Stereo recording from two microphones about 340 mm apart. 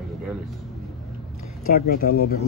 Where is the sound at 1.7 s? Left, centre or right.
Left.